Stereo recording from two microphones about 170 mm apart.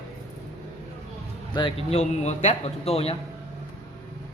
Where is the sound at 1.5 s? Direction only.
35° left (ahead or behind).